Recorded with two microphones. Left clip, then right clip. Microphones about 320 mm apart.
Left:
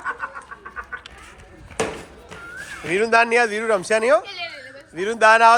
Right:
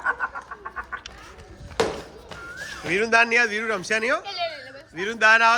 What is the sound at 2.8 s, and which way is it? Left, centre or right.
A man's voice, centre.